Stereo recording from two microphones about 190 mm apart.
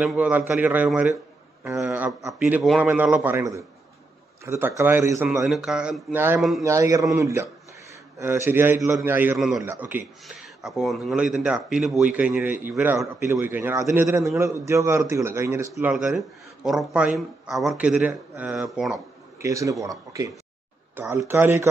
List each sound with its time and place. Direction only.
0.0 s a man's voice: 5° right (ahead or behind)
1.7 s a sound: 15° right (ahead or behind)
2.3 s a man's voice: 5° right (ahead or behind)
19.4 s a man's voice: 15° right (ahead or behind)